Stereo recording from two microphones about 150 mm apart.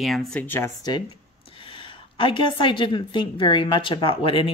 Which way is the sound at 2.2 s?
35° left (ahead or behind).